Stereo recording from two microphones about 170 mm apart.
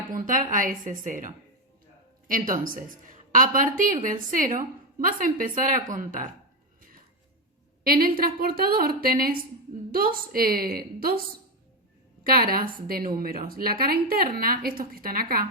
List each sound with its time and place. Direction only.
0.1 s speech: 55° right (ahead or behind)
7.9 s a woman's voice: 60° right (ahead or behind)
12.2 s a woman's voice: 60° right (ahead or behind)